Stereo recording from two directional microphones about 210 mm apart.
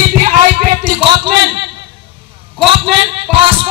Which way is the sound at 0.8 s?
20° right (ahead or behind).